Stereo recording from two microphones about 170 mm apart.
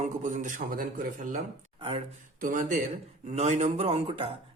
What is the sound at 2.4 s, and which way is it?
A man's voice, 50° right (ahead or behind).